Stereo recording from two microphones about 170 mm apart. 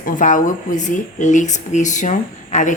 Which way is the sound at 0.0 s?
50° left (ahead or behind).